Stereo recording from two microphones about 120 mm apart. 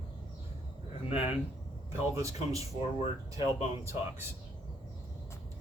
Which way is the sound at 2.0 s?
25° right (ahead or behind).